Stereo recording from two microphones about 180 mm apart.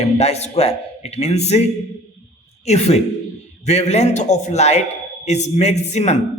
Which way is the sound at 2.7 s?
35° left (ahead or behind).